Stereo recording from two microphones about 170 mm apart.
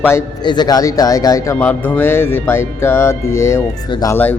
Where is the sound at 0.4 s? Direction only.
25° left (ahead or behind).